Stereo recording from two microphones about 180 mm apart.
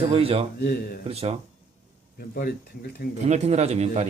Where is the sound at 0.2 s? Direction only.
30° right (ahead or behind).